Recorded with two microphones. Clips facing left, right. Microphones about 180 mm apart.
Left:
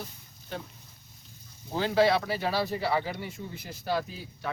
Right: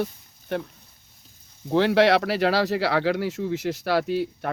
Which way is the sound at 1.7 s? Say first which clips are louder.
Right 6 dB; 75° right (ahead or behind).